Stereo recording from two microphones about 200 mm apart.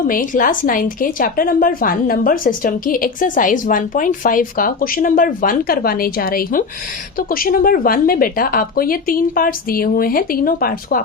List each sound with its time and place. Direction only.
0.1 s a woman's voice: 45° left (ahead or behind)